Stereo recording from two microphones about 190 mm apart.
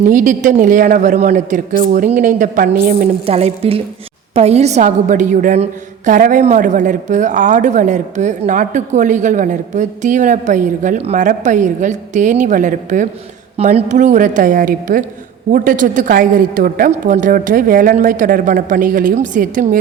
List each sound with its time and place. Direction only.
0.0 s a woman's voice: 45° right (ahead or behind)
3.2 s a woman's voice: 30° right (ahead or behind)